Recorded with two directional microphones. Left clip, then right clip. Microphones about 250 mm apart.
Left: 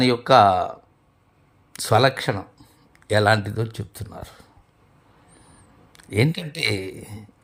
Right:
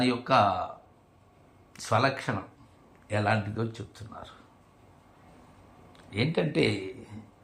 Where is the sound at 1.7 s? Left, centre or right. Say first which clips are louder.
Left 8 dB; left.